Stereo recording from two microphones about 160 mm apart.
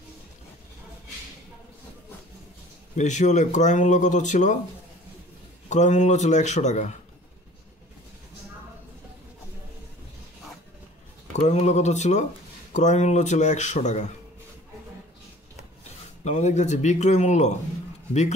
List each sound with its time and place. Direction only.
3.0 s speech: 50° left (ahead or behind)
5.7 s speech: 45° left (ahead or behind)
11.3 s speech: 45° left (ahead or behind)
16.3 s speech: 45° left (ahead or behind)